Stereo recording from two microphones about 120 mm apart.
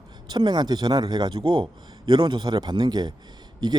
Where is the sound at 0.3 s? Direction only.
35° right (ahead or behind).